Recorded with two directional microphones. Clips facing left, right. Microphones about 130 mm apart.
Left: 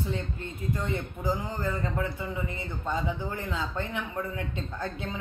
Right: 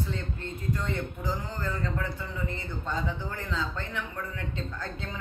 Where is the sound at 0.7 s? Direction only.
20° left (ahead or behind).